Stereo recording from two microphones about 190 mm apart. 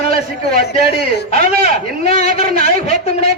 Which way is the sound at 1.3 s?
35° left (ahead or behind).